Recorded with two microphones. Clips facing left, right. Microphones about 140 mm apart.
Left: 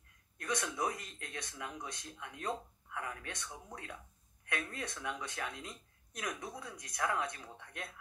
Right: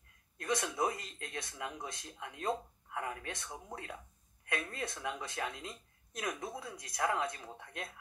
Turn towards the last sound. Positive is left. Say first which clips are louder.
# right 2 dB
turn(degrees=-30)  # may be behind; listen again after turning